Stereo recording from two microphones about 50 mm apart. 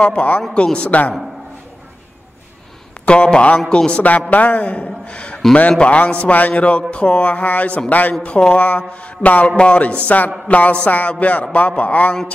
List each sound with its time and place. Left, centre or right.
0.0 s a man's voice: left
3.1 s a man's voice: left
4.3 s a man's voice: left
10.0 s a man's voice: left